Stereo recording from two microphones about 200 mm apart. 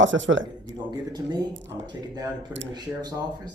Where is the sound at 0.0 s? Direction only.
70° right (ahead or behind).